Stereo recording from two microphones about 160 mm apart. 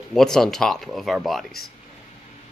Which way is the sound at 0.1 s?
5° left (ahead or behind).